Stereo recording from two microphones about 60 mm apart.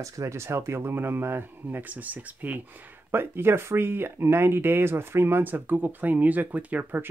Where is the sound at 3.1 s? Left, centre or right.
Right.